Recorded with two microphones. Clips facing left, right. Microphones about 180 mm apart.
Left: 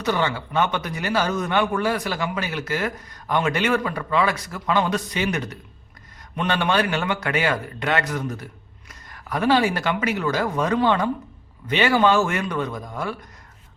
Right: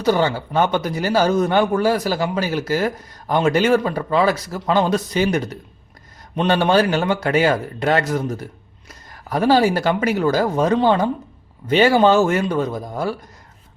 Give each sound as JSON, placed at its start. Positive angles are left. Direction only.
{"t": 0.0, "sound": "a man's voice", "side_deg": -35}
{"t": 6.5, "sound": "a man's voice", "side_deg": -35}